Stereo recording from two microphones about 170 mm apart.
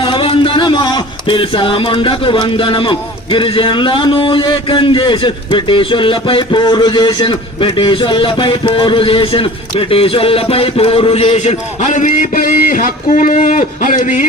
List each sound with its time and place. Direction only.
0.0 s a man's voice: 30° left (ahead or behind); by 14.3 s 50° left (ahead or behind)